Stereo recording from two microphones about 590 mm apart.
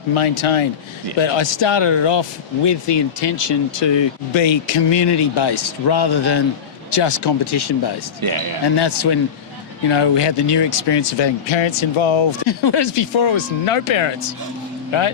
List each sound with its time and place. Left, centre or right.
0.1 s speech: left